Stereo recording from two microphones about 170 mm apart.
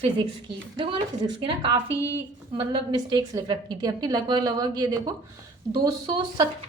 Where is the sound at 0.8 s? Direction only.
30° right (ahead or behind).